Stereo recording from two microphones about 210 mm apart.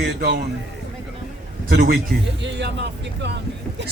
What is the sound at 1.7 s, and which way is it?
A man's voice, 45° right (ahead or behind).